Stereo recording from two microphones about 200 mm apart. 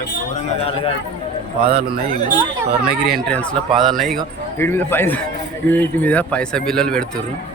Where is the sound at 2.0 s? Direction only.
45° right (ahead or behind).